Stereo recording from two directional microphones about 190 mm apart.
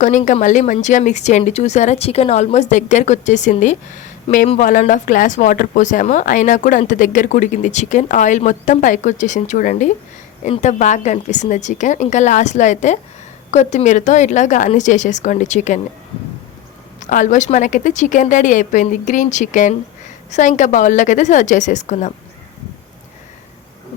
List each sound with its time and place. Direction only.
0.0 s speech: 40° left (ahead or behind)
17.0 s speech: 40° left (ahead or behind)